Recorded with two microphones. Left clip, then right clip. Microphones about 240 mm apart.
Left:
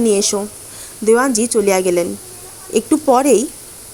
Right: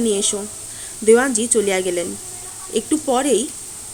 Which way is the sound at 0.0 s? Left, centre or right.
Centre.